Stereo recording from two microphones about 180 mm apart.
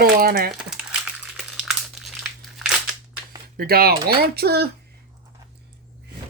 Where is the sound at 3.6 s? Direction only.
55° right (ahead or behind).